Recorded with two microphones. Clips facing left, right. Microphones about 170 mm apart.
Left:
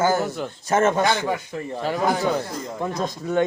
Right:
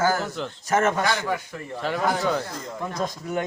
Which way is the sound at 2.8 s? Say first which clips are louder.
Left 3 dB; 25° left (ahead or behind).